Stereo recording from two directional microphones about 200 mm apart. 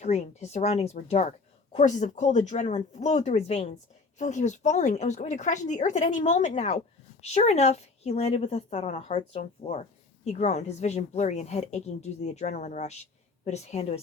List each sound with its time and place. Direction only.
0.0 s speech: 35° left (ahead or behind)